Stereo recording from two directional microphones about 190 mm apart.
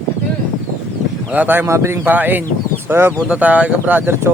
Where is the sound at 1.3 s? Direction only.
10° right (ahead or behind).